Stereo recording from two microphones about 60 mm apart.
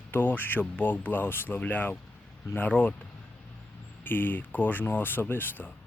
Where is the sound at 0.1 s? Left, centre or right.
Left.